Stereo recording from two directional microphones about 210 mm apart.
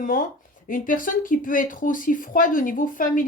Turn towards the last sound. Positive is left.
turn(degrees=40)  # may be behind; listen again after turning